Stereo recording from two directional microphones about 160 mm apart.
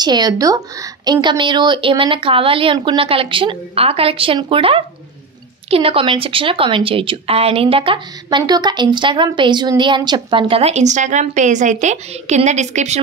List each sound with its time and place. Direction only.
0.0 s a woman's voice: 25° right (ahead or behind); by 13.0 s 45° right (ahead or behind)